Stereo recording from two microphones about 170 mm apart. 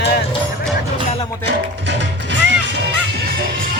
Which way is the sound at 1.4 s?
90° right.